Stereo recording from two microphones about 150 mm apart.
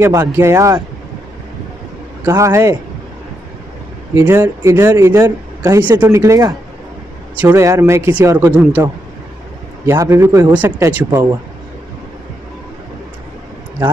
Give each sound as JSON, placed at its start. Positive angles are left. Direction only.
{"t": 0.0, "sound": "speech", "side_deg": -20}
{"t": 2.2, "sound": "speech", "side_deg": -20}
{"t": 4.1, "sound": "speech", "side_deg": -20}
{"t": 9.8, "sound": "speech", "side_deg": -20}